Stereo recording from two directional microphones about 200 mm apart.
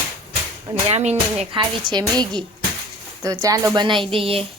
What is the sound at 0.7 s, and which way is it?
Speech, 30° right (ahead or behind).